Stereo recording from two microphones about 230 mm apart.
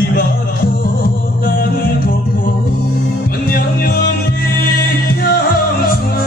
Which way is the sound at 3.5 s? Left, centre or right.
Left.